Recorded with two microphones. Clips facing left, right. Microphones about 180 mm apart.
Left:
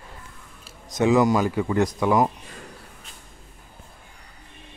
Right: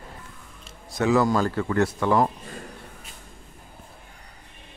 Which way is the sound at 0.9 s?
20° left (ahead or behind).